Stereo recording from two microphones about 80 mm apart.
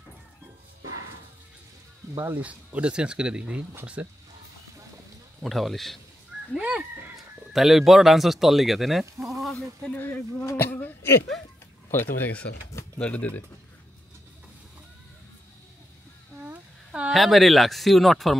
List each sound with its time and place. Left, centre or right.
2.1 s speech: right
5.4 s speech: centre
6.6 s speech: centre
7.5 s speech: centre
9.1 s a sound: right
9.4 s a sound: centre
9.9 s speech: left
16.4 s a sound: centre
17.1 s speech: centre